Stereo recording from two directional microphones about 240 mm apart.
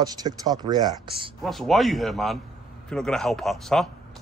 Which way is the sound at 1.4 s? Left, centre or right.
Centre.